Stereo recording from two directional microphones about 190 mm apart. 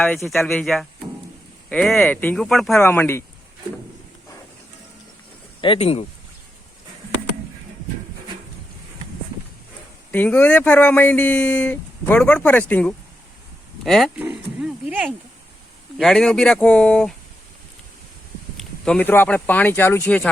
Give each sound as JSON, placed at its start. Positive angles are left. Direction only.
{"t": 0.0, "sound": "speech", "side_deg": 0}
{"t": 5.5, "sound": "speech", "side_deg": 25}
{"t": 10.1, "sound": "speech", "side_deg": 10}
{"t": 18.5, "sound": "speech", "side_deg": 5}